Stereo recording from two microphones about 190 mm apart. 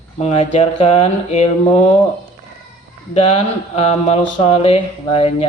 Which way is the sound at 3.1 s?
30° left (ahead or behind).